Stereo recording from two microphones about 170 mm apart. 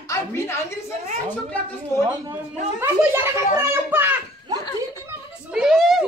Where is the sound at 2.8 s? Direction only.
15° right (ahead or behind).